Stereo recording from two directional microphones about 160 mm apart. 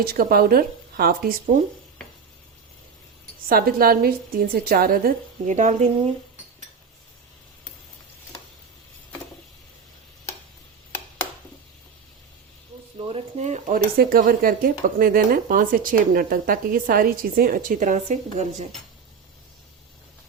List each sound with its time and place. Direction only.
0.0 s speech: 70° right (ahead or behind)
3.5 s speech: 65° right (ahead or behind); by 5.9 s 50° right (ahead or behind)
13.0 s speech: 35° right (ahead or behind)